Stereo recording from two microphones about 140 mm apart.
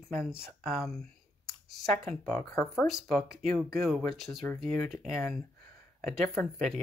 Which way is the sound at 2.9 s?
Centre (ahead or behind).